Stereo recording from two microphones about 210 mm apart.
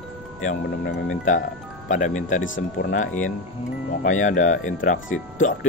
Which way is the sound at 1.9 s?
35° left (ahead or behind).